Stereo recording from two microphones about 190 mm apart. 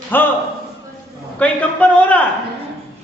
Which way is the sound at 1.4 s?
5° left (ahead or behind).